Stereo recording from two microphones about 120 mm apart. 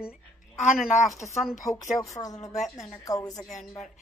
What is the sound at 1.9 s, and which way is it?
Speech, 30° left (ahead or behind).